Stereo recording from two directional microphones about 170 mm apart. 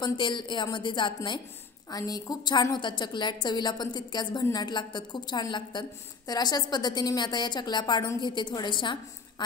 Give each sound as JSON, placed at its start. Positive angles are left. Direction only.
{"t": 0.0, "sound": "a woman's voice", "side_deg": 30}